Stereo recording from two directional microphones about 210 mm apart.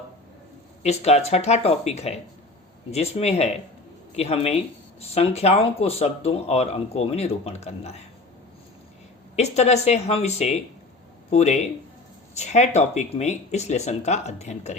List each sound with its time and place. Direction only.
0.9 s speech: 30° left (ahead or behind)
9.3 s speech: 30° left (ahead or behind)